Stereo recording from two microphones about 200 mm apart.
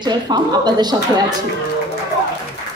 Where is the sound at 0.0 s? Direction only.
20° right (ahead or behind).